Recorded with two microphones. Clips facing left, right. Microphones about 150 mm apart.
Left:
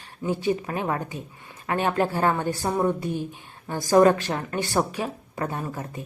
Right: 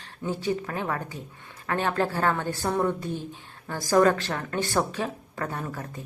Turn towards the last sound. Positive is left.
turn(degrees=15)  # may be behind; listen again after turning